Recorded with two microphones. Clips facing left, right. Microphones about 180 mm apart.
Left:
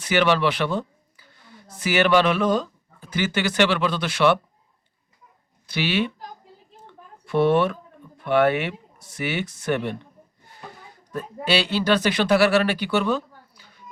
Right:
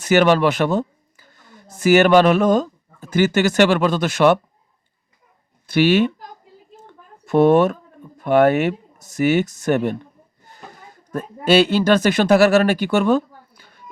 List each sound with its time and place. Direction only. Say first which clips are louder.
0.0 s speech: right 5 dB; 45° right (ahead or behind)
5.6 s speech: right 9 dB; 50° right (ahead or behind)
7.3 s speech: right 6 dB; 45° right (ahead or behind)
11.1 s speech: right 7 dB; 45° right (ahead or behind)